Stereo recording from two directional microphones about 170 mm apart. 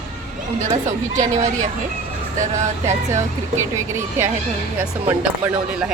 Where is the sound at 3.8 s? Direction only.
15° right (ahead or behind).